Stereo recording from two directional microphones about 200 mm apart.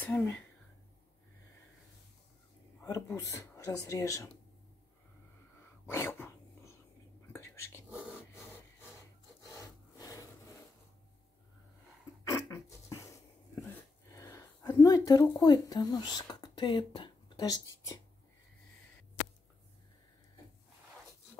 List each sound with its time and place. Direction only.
0.0 s speech: 10° left (ahead or behind)
2.8 s speech: 15° left (ahead or behind)
5.9 s dog: 10° left (ahead or behind)
7.3 s whispering: 10° left (ahead or behind)
9.9 s wood: 15° left (ahead or behind)
12.6 s beatboxing: 15° left (ahead or behind)
14.1 s speech: 15° left (ahead or behind)